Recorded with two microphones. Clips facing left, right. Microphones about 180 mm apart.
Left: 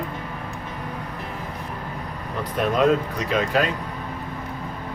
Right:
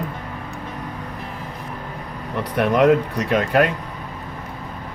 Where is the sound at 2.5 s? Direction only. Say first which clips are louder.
Right 4 dB; 70° right (ahead or behind).